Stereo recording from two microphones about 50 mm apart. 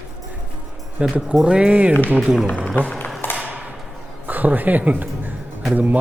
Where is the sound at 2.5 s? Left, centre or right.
Left.